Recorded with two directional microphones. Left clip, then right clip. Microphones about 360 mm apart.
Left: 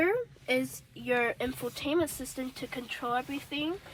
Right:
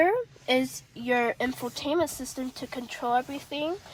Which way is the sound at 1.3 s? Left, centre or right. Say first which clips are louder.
Right 4 dB; right.